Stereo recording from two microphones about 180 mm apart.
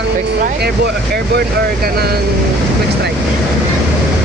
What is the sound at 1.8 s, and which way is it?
Speech, 60° right (ahead or behind).